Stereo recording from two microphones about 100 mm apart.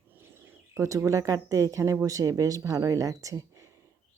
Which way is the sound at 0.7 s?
30° right (ahead or behind).